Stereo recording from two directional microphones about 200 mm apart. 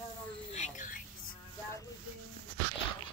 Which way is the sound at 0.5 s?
40° left (ahead or behind).